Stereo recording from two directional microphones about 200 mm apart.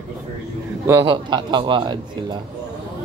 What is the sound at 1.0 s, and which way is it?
Speech, 25° right (ahead or behind).